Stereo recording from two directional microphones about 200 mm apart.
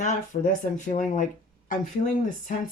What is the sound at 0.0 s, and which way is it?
Speech, 40° left (ahead or behind).